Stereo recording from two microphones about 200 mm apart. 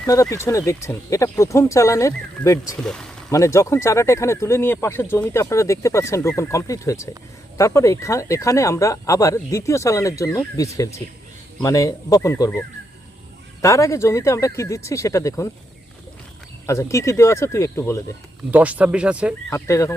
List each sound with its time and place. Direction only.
0.0 s speech: 15° left (ahead or behind)
2.8 s speech: 5° left (ahead or behind)
3.2 s speech: 15° left (ahead or behind)
16.6 s speech: 15° left (ahead or behind)
18.5 s speech: 5° right (ahead or behind)
19.5 s speech: 15° left (ahead or behind)